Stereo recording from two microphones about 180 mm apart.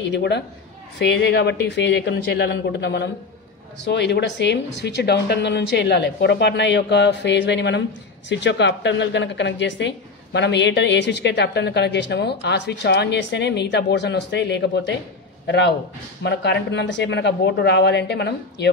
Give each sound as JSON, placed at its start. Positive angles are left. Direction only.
{"t": 0.0, "sound": "a woman's voice", "side_deg": 70}